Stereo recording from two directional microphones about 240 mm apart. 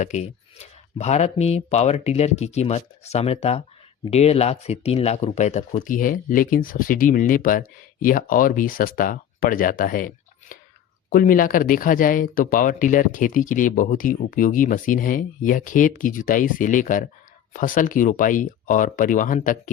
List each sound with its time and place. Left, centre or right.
0.0 s speech: left
10.5 s whispering: left
11.1 s speech: left